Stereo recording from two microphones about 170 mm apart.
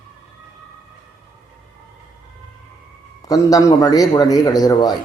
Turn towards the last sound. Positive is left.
turn(degrees=20)  # may be behind; listen again after turning